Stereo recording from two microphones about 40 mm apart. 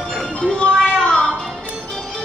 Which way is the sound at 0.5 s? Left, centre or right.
Left.